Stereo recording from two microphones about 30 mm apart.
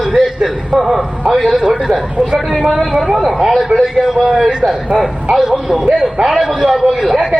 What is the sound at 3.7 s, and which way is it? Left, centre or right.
Speech, right.